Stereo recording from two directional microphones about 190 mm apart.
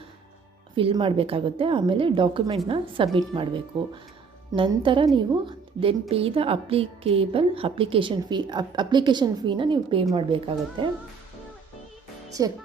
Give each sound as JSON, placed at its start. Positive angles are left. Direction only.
{"t": 0.8, "sound": "a woman's voice", "side_deg": -25}
{"t": 12.4, "sound": "a woman's voice", "side_deg": -20}